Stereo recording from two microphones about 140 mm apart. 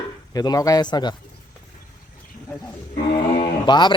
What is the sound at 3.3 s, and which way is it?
Speech, 40° left (ahead or behind).